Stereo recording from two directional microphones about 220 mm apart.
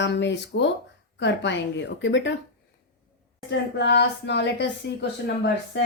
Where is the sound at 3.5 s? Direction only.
50° left (ahead or behind).